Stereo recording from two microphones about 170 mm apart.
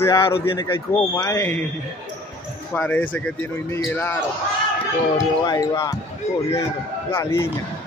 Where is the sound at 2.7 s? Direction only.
10° left (ahead or behind).